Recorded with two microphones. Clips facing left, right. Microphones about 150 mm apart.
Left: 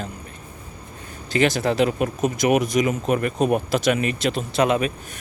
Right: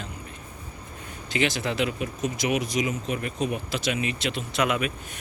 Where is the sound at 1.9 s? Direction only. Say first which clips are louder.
Left 7 dB; 55° left (ahead or behind); by 4.9 s 35° left (ahead or behind).